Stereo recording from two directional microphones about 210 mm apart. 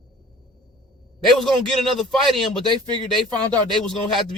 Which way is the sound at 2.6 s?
20° right (ahead or behind).